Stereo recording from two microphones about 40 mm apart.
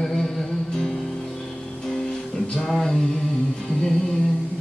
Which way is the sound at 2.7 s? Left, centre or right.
Centre.